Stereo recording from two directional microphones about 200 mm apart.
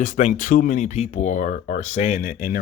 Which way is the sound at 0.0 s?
40° left (ahead or behind).